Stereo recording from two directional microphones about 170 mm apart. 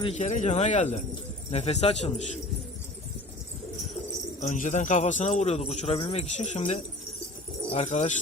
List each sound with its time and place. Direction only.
0.0 s a man's voice: 40° left (ahead or behind)
4.4 s a man's voice: 50° left (ahead or behind)